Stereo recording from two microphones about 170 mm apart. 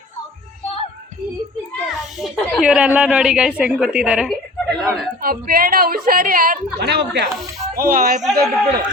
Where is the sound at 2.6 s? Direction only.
5° right (ahead or behind).